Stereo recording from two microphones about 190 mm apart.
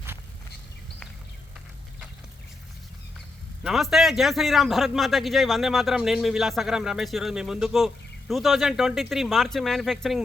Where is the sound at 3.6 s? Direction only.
Centre (ahead or behind).